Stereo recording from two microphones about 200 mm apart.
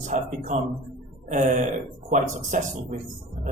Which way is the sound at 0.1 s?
40° right (ahead or behind).